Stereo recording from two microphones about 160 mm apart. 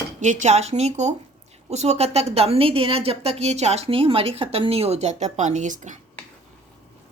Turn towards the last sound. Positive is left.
turn(degrees=-50)  # may be behind; listen again after turning